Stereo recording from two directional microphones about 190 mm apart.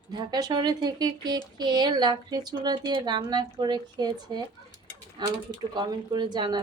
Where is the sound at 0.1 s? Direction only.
20° right (ahead or behind).